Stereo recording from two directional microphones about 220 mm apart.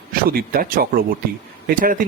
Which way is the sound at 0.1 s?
40° right (ahead or behind).